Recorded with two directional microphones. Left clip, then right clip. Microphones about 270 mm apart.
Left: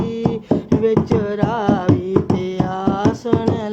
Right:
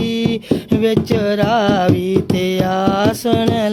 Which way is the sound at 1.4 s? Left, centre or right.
Right.